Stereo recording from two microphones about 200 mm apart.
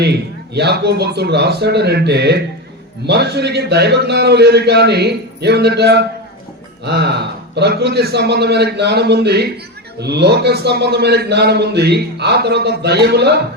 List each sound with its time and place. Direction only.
0.0 s a man's voice: 55° right (ahead or behind)